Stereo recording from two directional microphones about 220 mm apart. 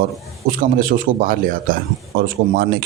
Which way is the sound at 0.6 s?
40° right (ahead or behind).